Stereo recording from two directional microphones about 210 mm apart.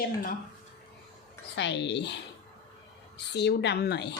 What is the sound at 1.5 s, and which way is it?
Speech, 55° left (ahead or behind).